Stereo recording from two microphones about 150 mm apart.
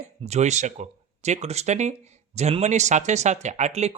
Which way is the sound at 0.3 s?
50° right (ahead or behind).